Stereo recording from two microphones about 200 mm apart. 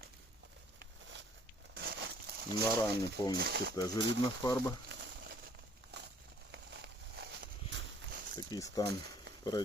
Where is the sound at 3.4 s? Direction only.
55° right (ahead or behind).